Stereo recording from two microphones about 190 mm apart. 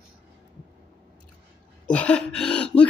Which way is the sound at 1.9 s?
5° left (ahead or behind).